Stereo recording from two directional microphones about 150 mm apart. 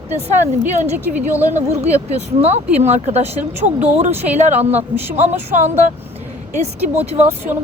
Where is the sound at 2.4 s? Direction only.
45° right (ahead or behind).